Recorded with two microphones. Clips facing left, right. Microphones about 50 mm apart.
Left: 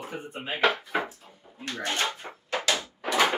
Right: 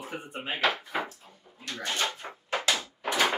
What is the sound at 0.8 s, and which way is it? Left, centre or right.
Speech, centre.